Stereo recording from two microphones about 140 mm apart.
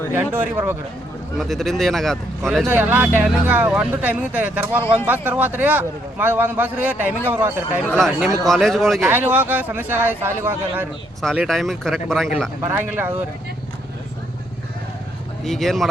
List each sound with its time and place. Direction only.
0.1 s a man's voice: 15° right (ahead or behind)
1.4 s a man's voice: centre (ahead or behind)
2.6 s a man's voice: 10° right (ahead or behind)
7.9 s a man's voice: centre (ahead or behind)
9.0 s a man's voice: 15° right (ahead or behind)
11.2 s a man's voice: centre (ahead or behind)
12.6 s a man's voice: 15° right (ahead or behind)
15.4 s a man's voice: centre (ahead or behind)